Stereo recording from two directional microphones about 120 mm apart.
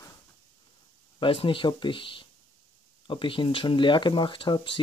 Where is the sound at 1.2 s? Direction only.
45° left (ahead or behind).